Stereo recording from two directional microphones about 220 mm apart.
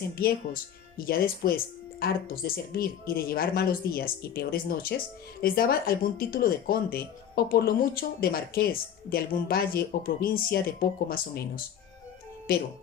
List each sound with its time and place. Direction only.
0.2 s speech: 40° left (ahead or behind)